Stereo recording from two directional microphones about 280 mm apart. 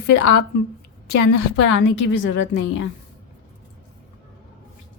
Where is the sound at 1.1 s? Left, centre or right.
Left.